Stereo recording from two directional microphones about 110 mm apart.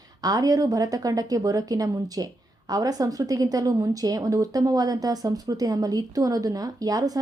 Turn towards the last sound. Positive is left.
turn(degrees=-35)  # may be behind; listen again after turning